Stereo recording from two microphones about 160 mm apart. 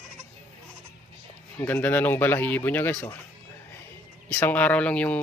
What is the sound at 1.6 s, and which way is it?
Speech, 10° left (ahead or behind).